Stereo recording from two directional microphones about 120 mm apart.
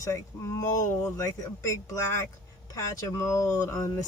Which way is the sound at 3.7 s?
25° left (ahead or behind).